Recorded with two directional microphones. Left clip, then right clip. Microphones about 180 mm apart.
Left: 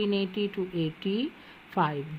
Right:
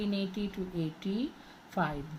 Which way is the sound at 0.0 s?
50° left (ahead or behind).